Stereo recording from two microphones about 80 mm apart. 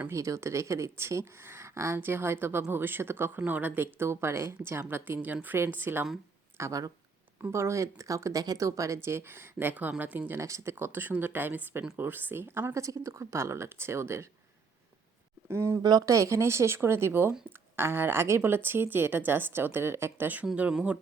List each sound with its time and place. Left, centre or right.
0.1 s speech: right
6.6 s speech: right
10.4 s speech: right
12.8 s speech: right
15.4 s speech: right
15.8 s speech: right
16.0 s speech: right; by 21.0 s centre